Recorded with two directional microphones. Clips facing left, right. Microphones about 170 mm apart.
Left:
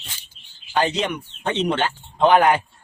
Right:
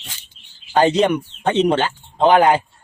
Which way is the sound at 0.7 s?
40° right (ahead or behind).